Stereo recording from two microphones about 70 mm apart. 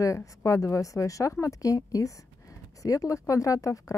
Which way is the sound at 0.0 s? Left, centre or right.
Left.